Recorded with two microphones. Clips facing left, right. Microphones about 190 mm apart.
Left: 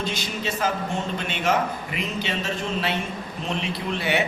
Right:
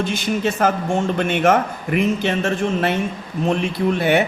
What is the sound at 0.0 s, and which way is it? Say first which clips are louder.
A man's voice: right 8 dB; 55° right (ahead or behind).